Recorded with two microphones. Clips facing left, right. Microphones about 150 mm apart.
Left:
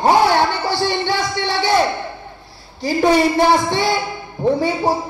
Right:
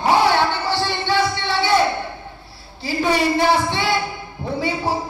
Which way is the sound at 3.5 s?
40° left (ahead or behind).